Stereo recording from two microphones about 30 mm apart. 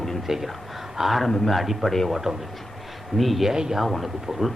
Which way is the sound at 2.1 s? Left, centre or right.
Centre.